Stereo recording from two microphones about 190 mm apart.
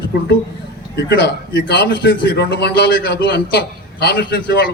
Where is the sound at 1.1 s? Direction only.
65° left (ahead or behind).